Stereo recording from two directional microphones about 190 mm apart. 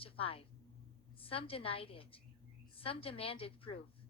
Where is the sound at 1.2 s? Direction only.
30° left (ahead or behind).